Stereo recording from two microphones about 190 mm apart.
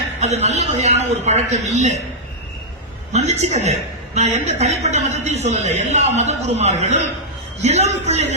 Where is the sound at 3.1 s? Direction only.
35° right (ahead or behind).